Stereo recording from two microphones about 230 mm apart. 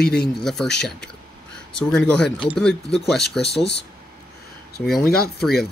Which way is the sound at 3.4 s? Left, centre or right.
Left.